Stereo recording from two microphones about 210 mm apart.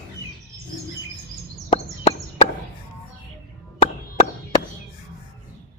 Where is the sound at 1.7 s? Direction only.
25° left (ahead or behind).